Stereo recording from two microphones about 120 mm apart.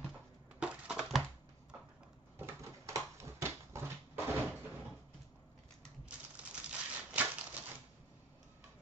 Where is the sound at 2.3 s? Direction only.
20° right (ahead or behind).